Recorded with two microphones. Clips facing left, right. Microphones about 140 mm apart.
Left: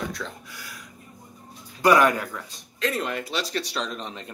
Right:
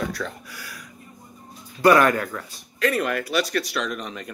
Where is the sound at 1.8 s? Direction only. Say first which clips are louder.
Right 2 dB; 15° left (ahead or behind).